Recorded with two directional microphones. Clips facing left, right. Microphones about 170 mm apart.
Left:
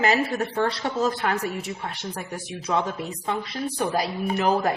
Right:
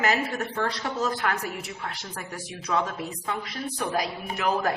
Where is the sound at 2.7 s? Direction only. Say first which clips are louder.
Left 2 dB; 25° left (ahead or behind).